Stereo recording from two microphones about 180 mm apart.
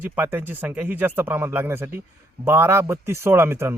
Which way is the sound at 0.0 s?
10° right (ahead or behind).